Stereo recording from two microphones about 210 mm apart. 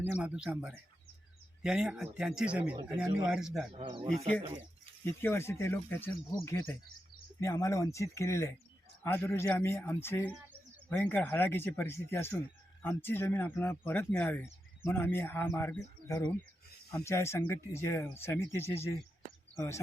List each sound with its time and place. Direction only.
0.0 s speech: 5° right (ahead or behind)
3.7 s speech: 25° right (ahead or behind)
5.0 s speech: 10° left (ahead or behind)